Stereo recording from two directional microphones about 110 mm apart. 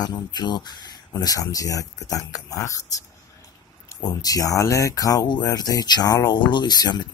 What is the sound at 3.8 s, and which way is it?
Speech, 30° left (ahead or behind).